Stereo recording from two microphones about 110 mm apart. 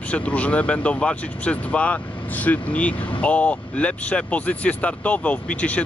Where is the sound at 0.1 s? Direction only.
10° left (ahead or behind).